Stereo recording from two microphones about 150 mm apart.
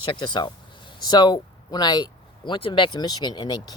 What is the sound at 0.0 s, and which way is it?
Speech, 35° left (ahead or behind).